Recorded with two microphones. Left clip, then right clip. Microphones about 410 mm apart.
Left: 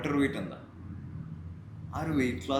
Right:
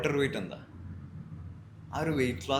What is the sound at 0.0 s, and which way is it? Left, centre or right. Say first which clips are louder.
Speech: right 1 dB; right.